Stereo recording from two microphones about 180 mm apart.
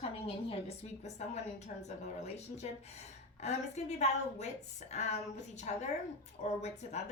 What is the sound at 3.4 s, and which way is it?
A woman's voice, 40° left (ahead or behind).